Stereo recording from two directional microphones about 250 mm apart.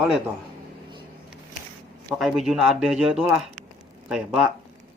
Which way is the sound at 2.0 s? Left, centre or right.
Centre.